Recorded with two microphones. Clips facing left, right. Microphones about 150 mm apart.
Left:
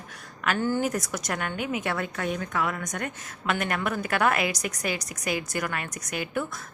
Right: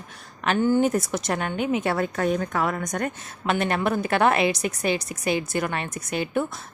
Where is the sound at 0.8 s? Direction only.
25° right (ahead or behind).